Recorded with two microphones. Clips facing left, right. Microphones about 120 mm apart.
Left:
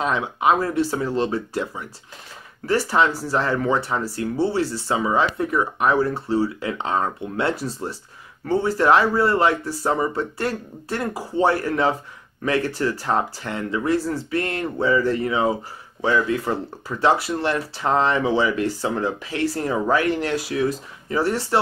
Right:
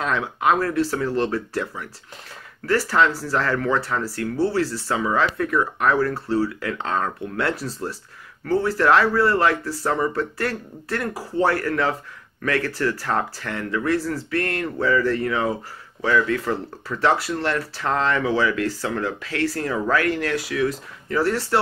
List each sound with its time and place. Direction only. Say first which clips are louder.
0.0 s speech: left 1 dB; 20° left (ahead or behind)